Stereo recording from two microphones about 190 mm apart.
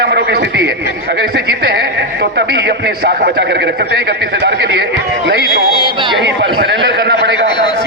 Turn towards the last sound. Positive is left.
turn(degrees=-60)  # may be behind; listen again after turning